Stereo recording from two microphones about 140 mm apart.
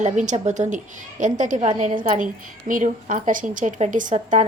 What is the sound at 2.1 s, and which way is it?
A woman's voice, 70° right (ahead or behind).